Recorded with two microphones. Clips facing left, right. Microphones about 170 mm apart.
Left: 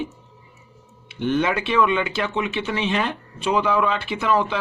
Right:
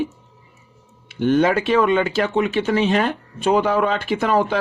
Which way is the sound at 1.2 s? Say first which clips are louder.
Right 5 dB; 45° right (ahead or behind).